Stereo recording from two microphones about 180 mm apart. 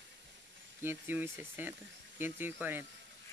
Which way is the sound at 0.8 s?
10° right (ahead or behind).